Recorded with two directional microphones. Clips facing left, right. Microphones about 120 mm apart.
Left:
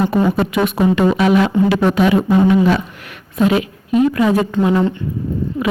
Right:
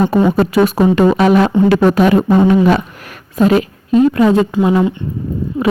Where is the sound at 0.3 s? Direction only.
40° right (ahead or behind); by 2.8 s 55° right (ahead or behind).